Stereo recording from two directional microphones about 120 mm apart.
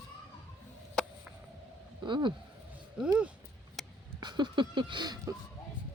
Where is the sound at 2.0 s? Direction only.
40° right (ahead or behind).